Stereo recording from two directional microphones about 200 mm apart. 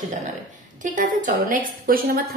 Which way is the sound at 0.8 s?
40° right (ahead or behind).